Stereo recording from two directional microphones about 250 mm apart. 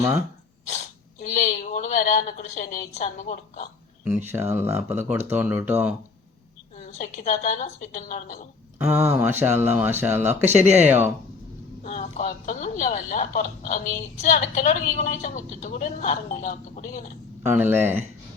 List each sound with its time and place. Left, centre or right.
0.6 s speech: left
4.0 s speech: centre
6.7 s speech: left
9.1 s speech: centre
11.8 s speech: left
17.4 s speech: centre